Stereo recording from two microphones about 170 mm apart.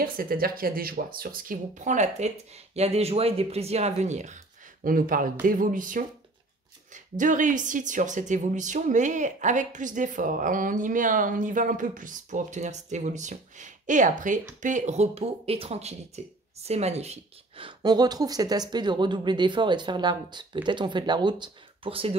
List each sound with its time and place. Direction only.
0.0 s speech: 60° right (ahead or behind); by 4.4 s 45° right (ahead or behind)
4.8 s speech: 55° right (ahead or behind); by 22.1 s 30° right (ahead or behind)